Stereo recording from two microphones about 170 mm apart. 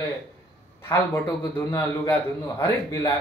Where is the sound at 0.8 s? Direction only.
20° left (ahead or behind).